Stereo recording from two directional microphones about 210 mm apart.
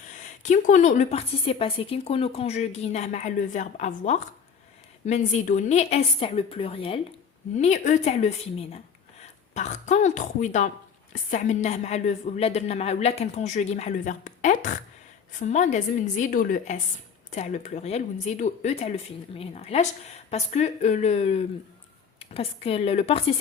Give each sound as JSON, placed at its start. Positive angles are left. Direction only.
{"t": 0.1, "sound": "a woman's voice", "side_deg": 35}